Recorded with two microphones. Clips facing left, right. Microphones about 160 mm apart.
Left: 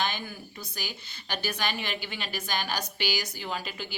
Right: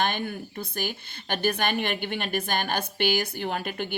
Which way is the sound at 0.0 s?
55° right (ahead or behind).